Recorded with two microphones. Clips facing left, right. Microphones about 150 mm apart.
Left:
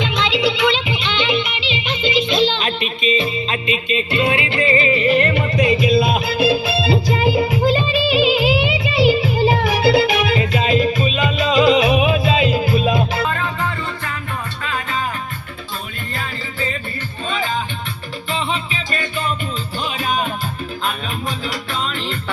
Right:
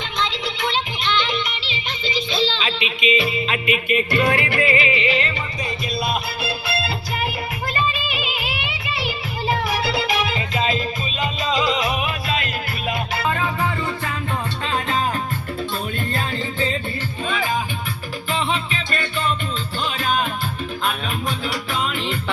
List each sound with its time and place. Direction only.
0.0 s music: 85° left; by 2.9 s 50° left (ahead or behind)
3.0 s music: 35° left (ahead or behind)
4.8 s music: 40° left (ahead or behind); by 10.0 s 90° left
10.5 s music: 65° left (ahead or behind)
13.2 s music: 15° right (ahead or behind)
14.6 s music: 30° right (ahead or behind)
18.3 s music: centre (ahead or behind)
21.9 s music: 5° right (ahead or behind)